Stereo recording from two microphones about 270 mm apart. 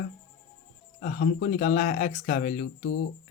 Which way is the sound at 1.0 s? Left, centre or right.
Left.